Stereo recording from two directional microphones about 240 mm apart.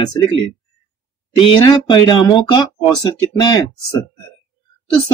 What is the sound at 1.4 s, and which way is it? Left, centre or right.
Speech, centre.